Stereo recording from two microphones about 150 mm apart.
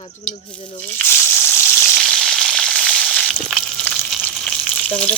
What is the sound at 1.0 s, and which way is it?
Frying, 15° left (ahead or behind).